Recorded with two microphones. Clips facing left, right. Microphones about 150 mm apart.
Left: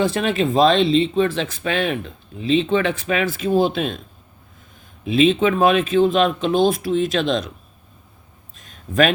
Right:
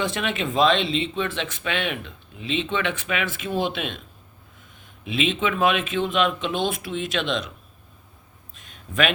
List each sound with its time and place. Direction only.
0.0 s speech: 35° left (ahead or behind)
5.0 s speech: 40° left (ahead or behind)
8.5 s a sound: 40° left (ahead or behind)